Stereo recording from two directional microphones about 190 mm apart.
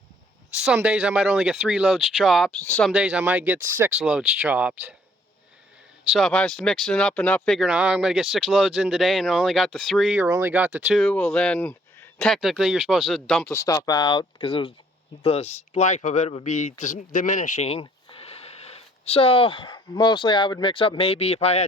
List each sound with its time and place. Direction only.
0.6 s speech: 5° right (ahead or behind)
2.9 s speech: 5° right (ahead or behind)
6.1 s speech: 5° left (ahead or behind)
13.4 s speech: 15° left (ahead or behind); by 21.6 s 35° left (ahead or behind)